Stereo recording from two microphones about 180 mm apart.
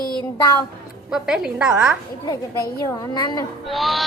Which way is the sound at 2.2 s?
20° left (ahead or behind).